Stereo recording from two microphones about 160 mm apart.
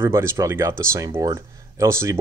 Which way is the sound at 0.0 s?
15° right (ahead or behind).